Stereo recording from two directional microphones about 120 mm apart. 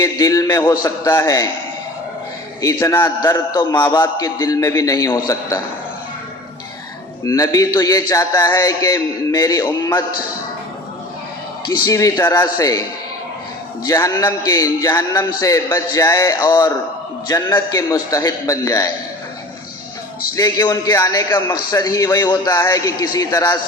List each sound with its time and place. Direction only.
0.0 s a man's voice: 30° left (ahead or behind)
2.6 s a man's voice: 30° left (ahead or behind)
4.2 s a man's voice: 30° left (ahead or behind)
7.3 s a man's voice: 30° left (ahead or behind)
11.9 s a man's voice: 30° left (ahead or behind)
13.8 s a man's voice: 25° left (ahead or behind)
20.3 s a man's voice: 30° left (ahead or behind)